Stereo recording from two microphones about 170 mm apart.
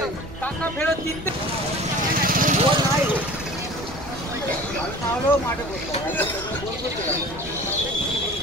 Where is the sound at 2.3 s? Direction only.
50° right (ahead or behind).